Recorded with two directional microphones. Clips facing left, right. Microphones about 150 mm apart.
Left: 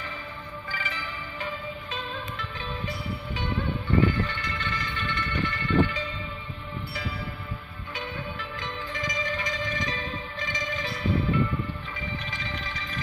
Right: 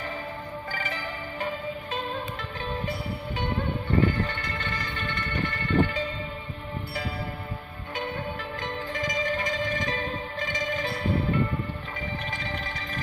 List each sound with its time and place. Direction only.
0.7 s music: 45° right (ahead or behind)
7.9 s music: 45° right (ahead or behind)
12.3 s music: 45° right (ahead or behind)